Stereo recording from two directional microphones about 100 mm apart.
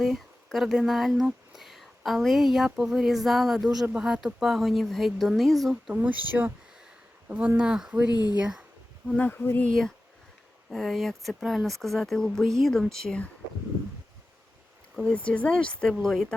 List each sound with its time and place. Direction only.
0.0 s speech: centre (ahead or behind)
5.9 s speech: 15° right (ahead or behind)
7.3 s speech: 15° right (ahead or behind)
8.1 s speech: 45° left (ahead or behind)
8.4 s speech: 5° right (ahead or behind)
9.1 s speech: 15° left (ahead or behind)
9.6 s speech: 5° left (ahead or behind)
15.1 s speech: 10° left (ahead or behind)